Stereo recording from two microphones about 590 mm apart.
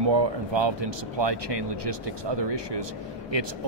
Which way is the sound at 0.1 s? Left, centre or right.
Right.